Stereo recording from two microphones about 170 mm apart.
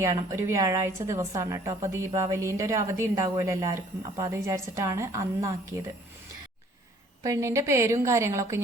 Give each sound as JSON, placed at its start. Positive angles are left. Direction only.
{"t": 0.0, "sound": "a woman's voice", "side_deg": -20}
{"t": 7.2, "sound": "a woman's voice", "side_deg": -20}